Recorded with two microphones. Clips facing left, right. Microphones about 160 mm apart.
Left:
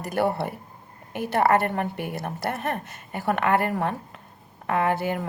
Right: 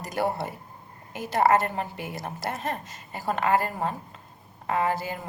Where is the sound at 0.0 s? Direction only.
60° left (ahead or behind).